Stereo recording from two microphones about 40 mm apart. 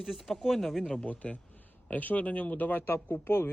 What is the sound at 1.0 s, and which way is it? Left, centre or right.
A man's voice, left.